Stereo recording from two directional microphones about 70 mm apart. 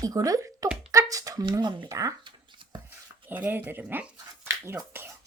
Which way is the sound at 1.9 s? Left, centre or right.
Right.